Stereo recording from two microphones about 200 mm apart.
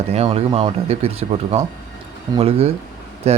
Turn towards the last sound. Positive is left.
turn(degrees=-30)  # may be behind; listen again after turning